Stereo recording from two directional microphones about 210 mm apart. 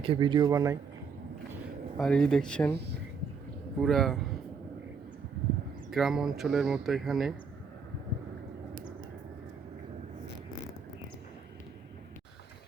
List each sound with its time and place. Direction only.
0.0 s speech: 25° right (ahead or behind)
2.0 s speech: 5° left (ahead or behind)
3.8 s speech: centre (ahead or behind)
5.9 s speech: centre (ahead or behind)